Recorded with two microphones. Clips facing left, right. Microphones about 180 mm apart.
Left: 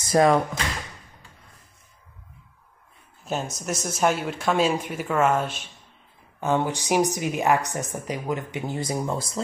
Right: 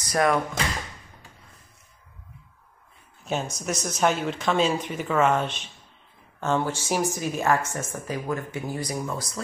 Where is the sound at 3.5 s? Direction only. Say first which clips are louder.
Even; centre (ahead or behind).